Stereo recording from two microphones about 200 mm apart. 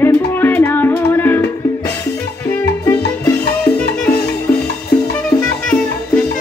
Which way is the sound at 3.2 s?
10° left (ahead or behind).